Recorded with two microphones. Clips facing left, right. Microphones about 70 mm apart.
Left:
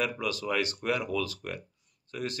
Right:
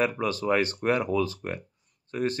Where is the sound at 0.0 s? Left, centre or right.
Right.